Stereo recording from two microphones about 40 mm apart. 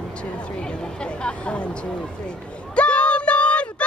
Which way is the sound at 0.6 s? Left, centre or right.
Left.